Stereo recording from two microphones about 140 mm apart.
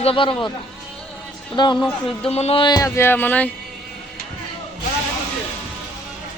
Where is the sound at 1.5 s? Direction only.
30° left (ahead or behind).